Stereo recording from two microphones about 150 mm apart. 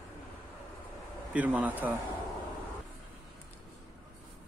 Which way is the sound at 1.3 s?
10° right (ahead or behind).